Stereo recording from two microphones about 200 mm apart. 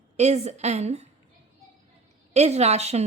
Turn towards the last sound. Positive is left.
turn(degrees=-30)  # may be behind; listen again after turning